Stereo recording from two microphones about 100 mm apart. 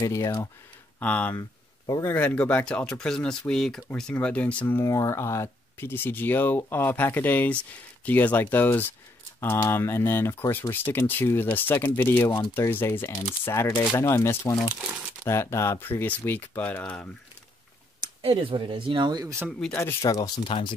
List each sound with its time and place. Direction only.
0.0 s speech: 35° left (ahead or behind)
0.9 s speech: 15° left (ahead or behind)
1.3 s a sound: 35° left (ahead or behind)
2.0 s speech: 10° left (ahead or behind)
14.7 s speech: 10° right (ahead or behind)
15.2 s speech: 25° left (ahead or behind)
18.0 s speech: 65° right (ahead or behind); by 19.3 s 40° right (ahead or behind)
19.7 s speech: 25° left (ahead or behind)